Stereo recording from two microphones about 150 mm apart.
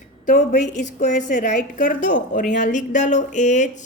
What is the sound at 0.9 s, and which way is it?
A woman's voice, 55° left (ahead or behind).